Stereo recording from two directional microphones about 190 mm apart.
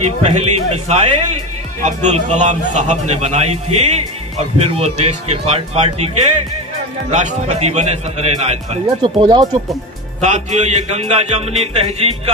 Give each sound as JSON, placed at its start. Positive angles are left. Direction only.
{"t": 0.2, "sound": "speech", "side_deg": -35}
{"t": 8.8, "sound": "speech", "side_deg": -25}
{"t": 10.2, "sound": "speech", "side_deg": -35}